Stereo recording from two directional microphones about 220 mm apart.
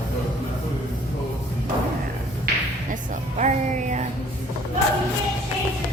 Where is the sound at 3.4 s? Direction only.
35° right (ahead or behind).